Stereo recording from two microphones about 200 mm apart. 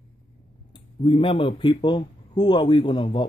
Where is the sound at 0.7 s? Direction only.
25° left (ahead or behind).